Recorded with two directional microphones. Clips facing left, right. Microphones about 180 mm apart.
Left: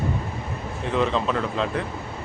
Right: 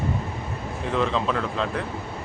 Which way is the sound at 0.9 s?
Centre (ahead or behind).